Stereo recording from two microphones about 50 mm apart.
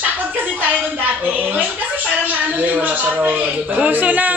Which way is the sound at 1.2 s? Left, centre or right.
Right.